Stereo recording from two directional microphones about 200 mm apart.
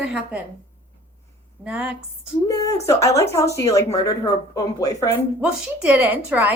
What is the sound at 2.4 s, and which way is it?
A woman's voice, 15° left (ahead or behind).